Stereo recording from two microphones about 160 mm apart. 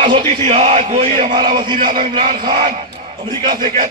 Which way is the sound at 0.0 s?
35° right (ahead or behind).